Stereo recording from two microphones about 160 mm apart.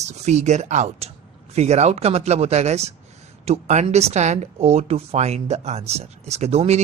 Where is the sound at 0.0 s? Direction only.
45° right (ahead or behind).